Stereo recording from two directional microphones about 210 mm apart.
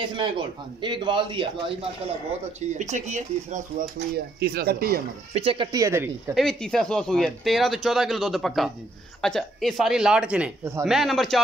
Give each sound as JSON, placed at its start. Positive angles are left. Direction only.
{"t": 0.0, "sound": "a man's voice", "side_deg": -25}
{"t": 2.8, "sound": "speech", "side_deg": -35}
{"t": 4.4, "sound": "speech", "side_deg": -45}
{"t": 5.3, "sound": "speech", "side_deg": -25}
{"t": 6.3, "sound": "speech", "side_deg": 0}
{"t": 10.9, "sound": "speech", "side_deg": 0}